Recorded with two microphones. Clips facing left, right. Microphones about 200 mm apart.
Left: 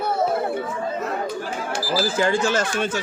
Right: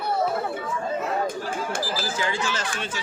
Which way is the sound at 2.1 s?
50° left (ahead or behind).